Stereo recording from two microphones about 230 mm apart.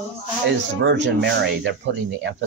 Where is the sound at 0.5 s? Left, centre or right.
Right.